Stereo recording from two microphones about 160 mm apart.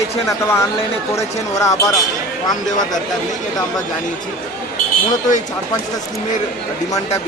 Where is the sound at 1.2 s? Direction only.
20° left (ahead or behind).